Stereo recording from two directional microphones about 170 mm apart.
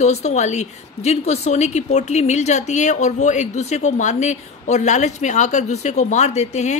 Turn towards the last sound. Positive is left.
turn(degrees=40)  # may be behind; listen again after turning